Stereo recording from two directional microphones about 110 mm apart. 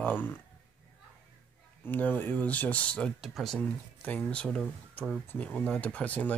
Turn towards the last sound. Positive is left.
turn(degrees=15)  # may be behind; listen again after turning